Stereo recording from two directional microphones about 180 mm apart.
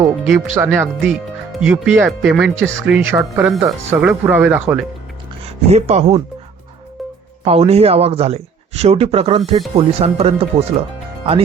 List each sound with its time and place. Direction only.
0.3 s speech: 5° right (ahead or behind)
5.7 s speech: 35° right (ahead or behind)
7.4 s speech: 35° right (ahead or behind)